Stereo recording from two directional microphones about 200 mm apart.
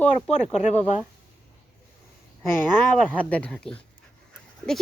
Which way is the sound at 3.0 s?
5° left (ahead or behind).